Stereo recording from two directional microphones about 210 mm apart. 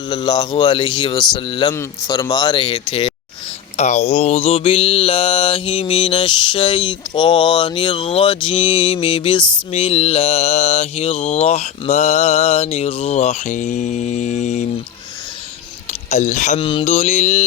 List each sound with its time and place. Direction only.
0.1 s mantra: 20° left (ahead or behind)
15.9 s mantra: 35° left (ahead or behind)